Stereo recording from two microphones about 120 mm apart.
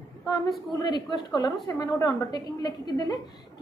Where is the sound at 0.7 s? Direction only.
35° left (ahead or behind).